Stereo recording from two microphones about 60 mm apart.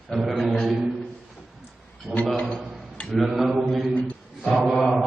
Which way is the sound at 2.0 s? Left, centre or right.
Centre.